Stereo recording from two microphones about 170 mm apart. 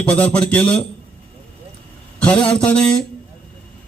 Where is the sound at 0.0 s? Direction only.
5° left (ahead or behind).